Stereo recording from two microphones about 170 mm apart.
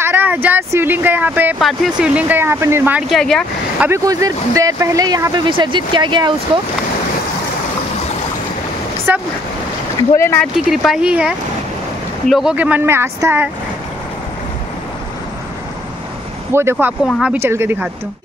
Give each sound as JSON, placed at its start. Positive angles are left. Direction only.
{"t": 0.0, "sound": "speech", "side_deg": -10}
{"t": 3.8, "sound": "speech", "side_deg": -20}
{"t": 9.1, "sound": "speech", "side_deg": -10}
{"t": 10.1, "sound": "speech", "side_deg": 15}
{"t": 10.4, "sound": "speech", "side_deg": 0}
{"t": 16.7, "sound": "speech", "side_deg": 0}
{"t": 17.4, "sound": "speech", "side_deg": -15}